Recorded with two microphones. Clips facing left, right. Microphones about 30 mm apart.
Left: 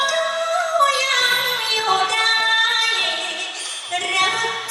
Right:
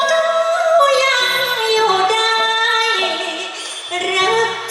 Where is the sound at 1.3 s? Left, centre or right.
Centre.